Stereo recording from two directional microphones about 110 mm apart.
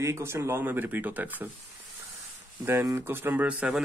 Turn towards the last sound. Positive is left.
turn(degrees=-15)  # may be behind; listen again after turning